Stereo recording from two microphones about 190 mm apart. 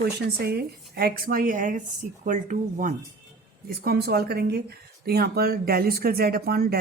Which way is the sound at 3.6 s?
55° right (ahead or behind).